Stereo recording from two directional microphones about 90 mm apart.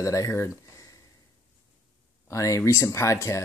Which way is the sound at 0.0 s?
35° left (ahead or behind).